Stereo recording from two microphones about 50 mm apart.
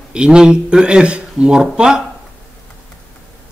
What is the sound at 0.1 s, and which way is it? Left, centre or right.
Speech, centre.